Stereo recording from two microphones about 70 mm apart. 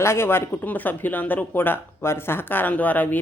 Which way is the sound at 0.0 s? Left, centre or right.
Left.